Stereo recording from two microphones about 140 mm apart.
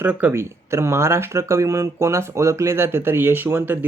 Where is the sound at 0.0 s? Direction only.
10° right (ahead or behind).